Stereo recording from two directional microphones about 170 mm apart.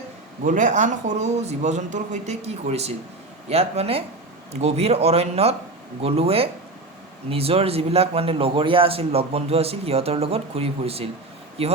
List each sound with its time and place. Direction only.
0.4 s a man's voice: 45° right (ahead or behind)